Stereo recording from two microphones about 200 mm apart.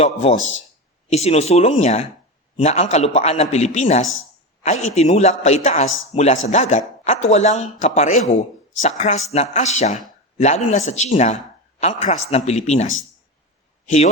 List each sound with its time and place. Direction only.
0.0 s a man's voice: 30° left (ahead or behind)
0.3 s speech: 70° left (ahead or behind)
1.1 s a man's voice: 30° left (ahead or behind)